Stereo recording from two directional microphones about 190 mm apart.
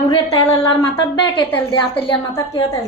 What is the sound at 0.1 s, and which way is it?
A woman's voice, 20° left (ahead or behind).